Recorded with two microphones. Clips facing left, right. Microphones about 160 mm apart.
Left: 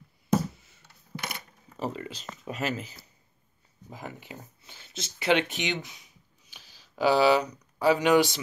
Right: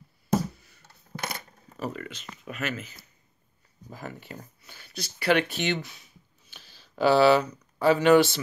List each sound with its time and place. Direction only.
1.8 s speech: 25° left (ahead or behind)
3.9 s speech: 15° left (ahead or behind)